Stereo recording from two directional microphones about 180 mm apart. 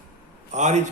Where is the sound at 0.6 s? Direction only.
40° right (ahead or behind).